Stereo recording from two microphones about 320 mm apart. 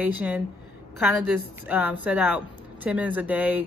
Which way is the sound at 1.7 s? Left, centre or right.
Centre.